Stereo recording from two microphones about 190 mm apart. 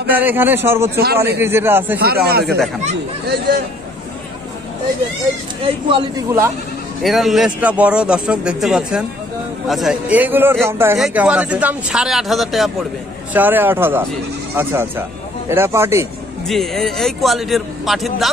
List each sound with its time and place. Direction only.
0.1 s a man's voice: 10° right (ahead or behind)
0.9 s speech: 55° right (ahead or behind)
1.4 s a man's voice: 10° right (ahead or behind)
2.0 s speech: 55° right (ahead or behind)
5.9 s a man's voice: 30° right (ahead or behind)
7.0 s a man's voice: centre (ahead or behind)
16.4 s speech: centre (ahead or behind)